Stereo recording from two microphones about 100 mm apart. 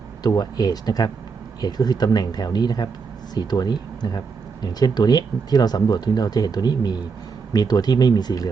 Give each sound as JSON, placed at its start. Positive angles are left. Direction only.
{"t": 0.2, "sound": "speech", "side_deg": 40}